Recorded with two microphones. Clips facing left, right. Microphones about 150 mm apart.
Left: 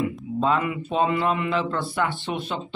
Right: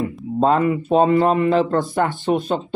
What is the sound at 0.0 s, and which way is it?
A man's voice, 40° right (ahead or behind).